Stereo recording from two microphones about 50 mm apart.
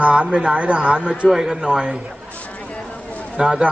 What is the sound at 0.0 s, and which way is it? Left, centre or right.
Speech, right.